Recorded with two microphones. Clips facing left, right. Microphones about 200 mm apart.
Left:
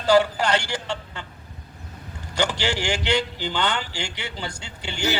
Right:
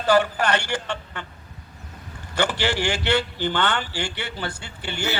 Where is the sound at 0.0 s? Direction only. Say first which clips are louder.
Left 1 dB; 10° left (ahead or behind).